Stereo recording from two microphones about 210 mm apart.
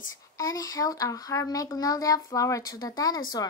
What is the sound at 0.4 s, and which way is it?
A child's voice, 15° left (ahead or behind).